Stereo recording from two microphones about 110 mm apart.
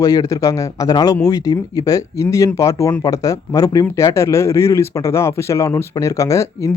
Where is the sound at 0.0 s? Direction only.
30° left (ahead or behind).